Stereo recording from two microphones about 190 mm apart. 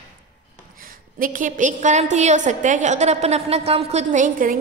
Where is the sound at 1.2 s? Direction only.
45° right (ahead or behind).